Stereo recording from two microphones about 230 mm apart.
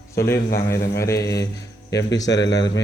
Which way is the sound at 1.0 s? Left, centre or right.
Centre.